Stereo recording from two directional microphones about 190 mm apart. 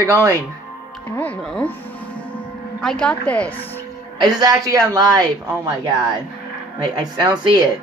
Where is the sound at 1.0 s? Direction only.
10° left (ahead or behind).